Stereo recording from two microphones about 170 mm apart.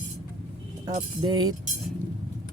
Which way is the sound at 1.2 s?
25° right (ahead or behind).